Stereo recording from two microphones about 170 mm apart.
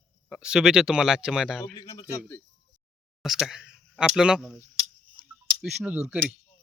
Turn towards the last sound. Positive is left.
turn(degrees=-5)  # may be behind; listen again after turning